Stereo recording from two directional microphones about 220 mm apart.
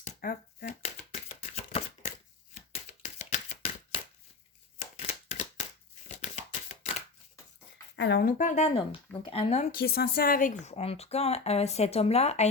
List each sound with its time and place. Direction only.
0.0 s shuffling cards: 35° left (ahead or behind)
1.4 s a sound: 30° left (ahead or behind)
6.1 s shuffling cards: 30° left (ahead or behind)
7.9 s speech: 50° left (ahead or behind)
8.4 s a woman's voice: 35° left (ahead or behind)
9.8 s a woman's voice: 45° left (ahead or behind)